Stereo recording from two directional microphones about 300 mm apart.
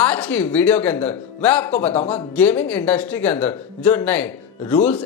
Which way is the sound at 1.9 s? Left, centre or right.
Left.